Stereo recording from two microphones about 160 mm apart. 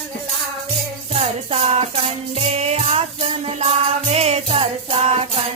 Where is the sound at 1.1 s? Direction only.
40° right (ahead or behind).